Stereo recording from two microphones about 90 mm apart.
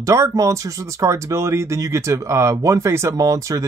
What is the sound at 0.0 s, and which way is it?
Speech, 35° right (ahead or behind).